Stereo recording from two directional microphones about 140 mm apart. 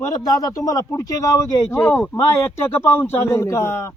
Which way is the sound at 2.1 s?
20° left (ahead or behind).